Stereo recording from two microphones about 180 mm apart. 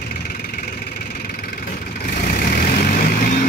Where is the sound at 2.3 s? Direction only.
60° left (ahead or behind).